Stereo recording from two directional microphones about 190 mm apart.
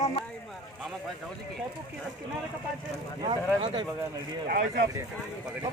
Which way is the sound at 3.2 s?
25° right (ahead or behind).